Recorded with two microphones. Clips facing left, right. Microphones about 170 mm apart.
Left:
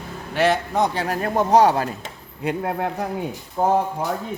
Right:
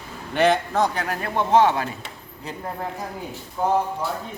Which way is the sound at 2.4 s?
70° left (ahead or behind).